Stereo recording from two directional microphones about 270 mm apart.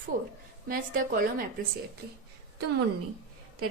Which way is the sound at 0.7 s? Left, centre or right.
Right.